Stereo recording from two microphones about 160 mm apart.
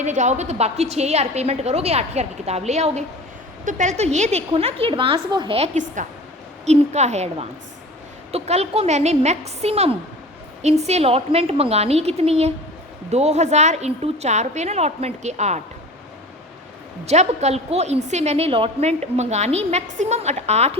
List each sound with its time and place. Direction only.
0.0 s a woman's voice: 45° right (ahead or behind); by 5.5 s 30° right (ahead or behind)
5.5 s a woman's voice: 45° right (ahead or behind)
17.1 s a woman's voice: 45° right (ahead or behind)